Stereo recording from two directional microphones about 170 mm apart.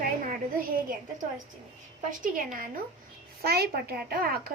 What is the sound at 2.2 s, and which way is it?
Speech, 55° right (ahead or behind).